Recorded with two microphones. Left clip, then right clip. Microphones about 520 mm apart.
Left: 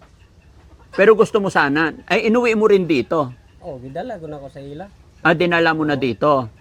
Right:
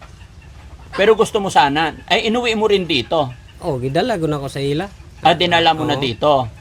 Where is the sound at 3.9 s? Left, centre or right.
Right.